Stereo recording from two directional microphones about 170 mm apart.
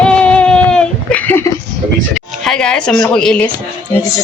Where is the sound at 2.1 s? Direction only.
Centre (ahead or behind).